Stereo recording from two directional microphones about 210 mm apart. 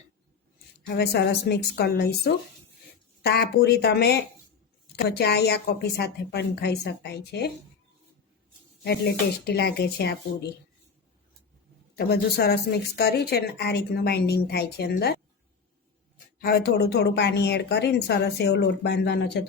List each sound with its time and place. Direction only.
0.9 s a woman's voice: 50° left (ahead or behind)
8.8 s a woman's voice: 50° left (ahead or behind)
11.9 s a woman's voice: 50° left (ahead or behind)
16.4 s a woman's voice: 45° left (ahead or behind)